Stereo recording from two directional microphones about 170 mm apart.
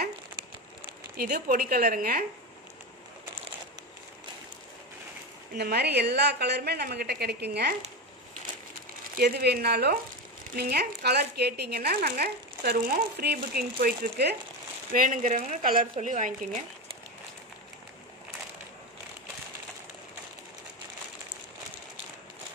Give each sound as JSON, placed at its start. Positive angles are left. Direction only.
{"t": 1.1, "sound": "speech", "side_deg": -55}
{"t": 5.6, "sound": "speech", "side_deg": -70}
{"t": 9.2, "sound": "speech", "side_deg": -70}
{"t": 14.9, "sound": "a woman's voice", "side_deg": -50}
{"t": 15.6, "sound": "a woman's voice", "side_deg": -55}